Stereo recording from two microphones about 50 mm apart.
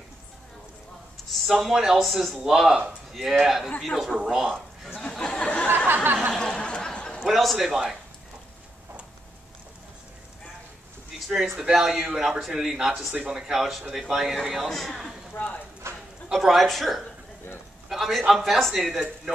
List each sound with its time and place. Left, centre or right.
1.3 s speech: centre
5.0 s a sound: centre
7.2 s speech: centre
11.3 s a man's voice: centre
11.9 s a man's voice: right
12.2 s speech: centre
15.3 s speech: left
15.8 s dog: right
16.3 s a man's voice: centre